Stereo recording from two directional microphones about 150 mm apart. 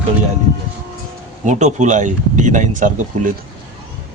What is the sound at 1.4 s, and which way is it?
Speech, 55° right (ahead or behind).